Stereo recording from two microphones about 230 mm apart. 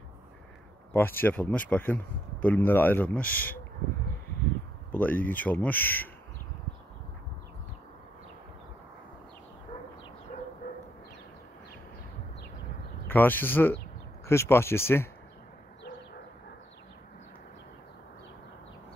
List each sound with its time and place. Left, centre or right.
0.9 s speech: centre
4.9 s speech: centre
10.3 s dog: left
13.0 s speech: centre